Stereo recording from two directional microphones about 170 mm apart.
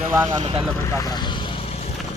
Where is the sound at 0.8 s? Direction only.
20° left (ahead or behind).